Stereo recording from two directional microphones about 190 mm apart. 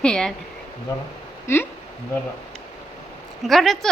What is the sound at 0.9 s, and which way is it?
Speech, 15° left (ahead or behind).